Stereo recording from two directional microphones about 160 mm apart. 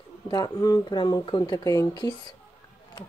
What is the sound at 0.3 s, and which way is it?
Speech, 25° left (ahead or behind).